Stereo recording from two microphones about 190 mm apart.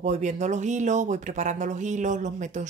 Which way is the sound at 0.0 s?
40° right (ahead or behind).